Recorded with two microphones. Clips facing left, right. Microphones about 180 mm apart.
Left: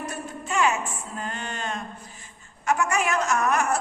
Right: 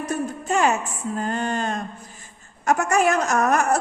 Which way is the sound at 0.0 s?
40° right (ahead or behind).